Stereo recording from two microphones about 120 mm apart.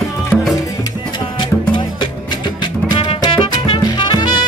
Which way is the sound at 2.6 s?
40° left (ahead or behind).